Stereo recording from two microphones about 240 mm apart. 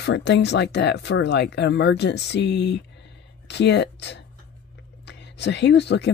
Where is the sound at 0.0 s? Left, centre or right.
Left.